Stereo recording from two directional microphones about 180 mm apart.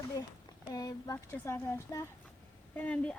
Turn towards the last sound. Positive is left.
turn(degrees=5)  # may be behind; listen again after turning